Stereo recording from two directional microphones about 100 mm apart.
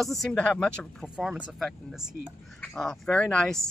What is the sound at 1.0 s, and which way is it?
Speech, 10° right (ahead or behind).